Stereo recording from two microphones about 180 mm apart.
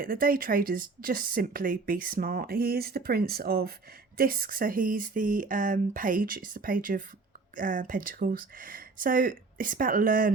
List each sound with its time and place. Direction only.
0.0 s speech: 50° right (ahead or behind)